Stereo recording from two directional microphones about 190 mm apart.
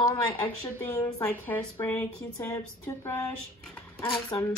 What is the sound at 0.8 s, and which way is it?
Speech, 10° left (ahead or behind).